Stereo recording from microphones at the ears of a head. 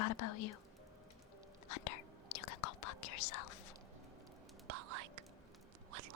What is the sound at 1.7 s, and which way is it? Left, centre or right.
Whispering, left.